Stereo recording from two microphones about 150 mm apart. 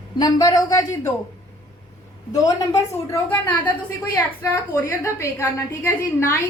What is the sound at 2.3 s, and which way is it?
A woman's voice, 20° left (ahead or behind).